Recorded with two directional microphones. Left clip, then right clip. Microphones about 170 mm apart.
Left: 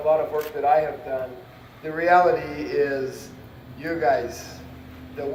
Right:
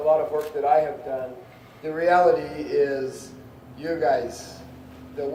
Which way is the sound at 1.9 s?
25° right (ahead or behind).